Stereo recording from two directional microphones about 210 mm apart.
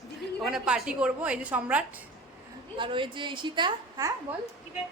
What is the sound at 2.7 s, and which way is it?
A woman's voice, 25° right (ahead or behind).